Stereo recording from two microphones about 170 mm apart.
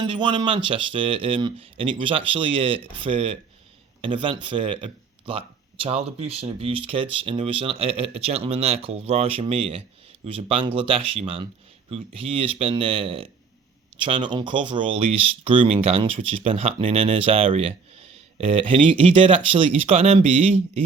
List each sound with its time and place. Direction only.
0.0 s speech: 25° right (ahead or behind)